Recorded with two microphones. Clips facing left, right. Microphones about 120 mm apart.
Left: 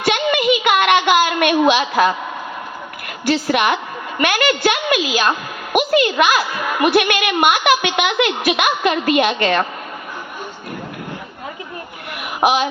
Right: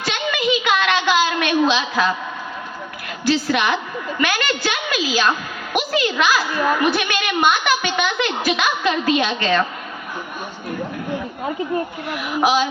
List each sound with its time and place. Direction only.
0.0 s a sound: 60° left (ahead or behind)
3.2 s a woman's voice: 55° left (ahead or behind)
12.1 s a woman's voice: 55° left (ahead or behind)